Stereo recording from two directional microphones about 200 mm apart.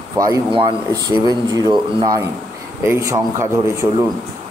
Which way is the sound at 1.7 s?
20° right (ahead or behind).